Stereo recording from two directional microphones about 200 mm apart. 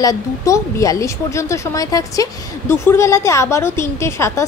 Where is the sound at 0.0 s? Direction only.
15° left (ahead or behind).